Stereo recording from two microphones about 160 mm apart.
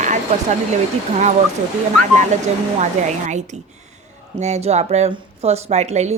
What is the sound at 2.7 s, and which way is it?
Speech, 50° right (ahead or behind).